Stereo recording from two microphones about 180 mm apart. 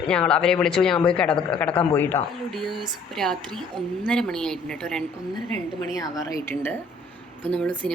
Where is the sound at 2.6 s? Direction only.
Centre (ahead or behind).